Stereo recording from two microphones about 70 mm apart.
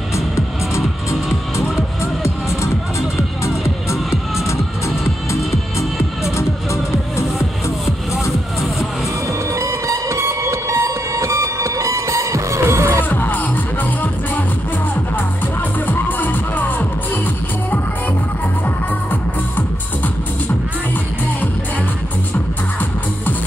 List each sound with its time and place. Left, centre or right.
3.4 s music: left
9.5 s music: right
13.1 s music: left
15.9 s music: left